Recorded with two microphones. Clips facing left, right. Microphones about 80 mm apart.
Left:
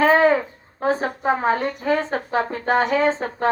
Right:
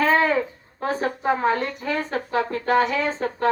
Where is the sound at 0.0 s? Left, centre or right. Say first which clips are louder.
Left 4 dB; left.